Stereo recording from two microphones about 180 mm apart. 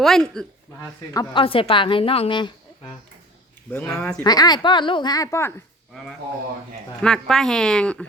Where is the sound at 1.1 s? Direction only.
30° left (ahead or behind).